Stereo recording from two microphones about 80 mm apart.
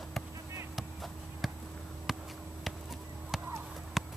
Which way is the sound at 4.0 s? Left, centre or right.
Centre.